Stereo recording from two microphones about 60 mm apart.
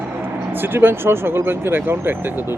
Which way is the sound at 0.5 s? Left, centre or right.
Right.